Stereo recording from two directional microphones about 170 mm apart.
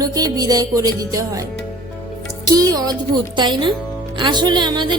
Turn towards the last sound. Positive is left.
turn(degrees=-25)  # may be behind; listen again after turning